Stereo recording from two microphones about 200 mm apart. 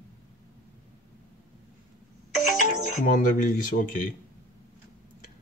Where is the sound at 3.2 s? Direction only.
40° left (ahead or behind).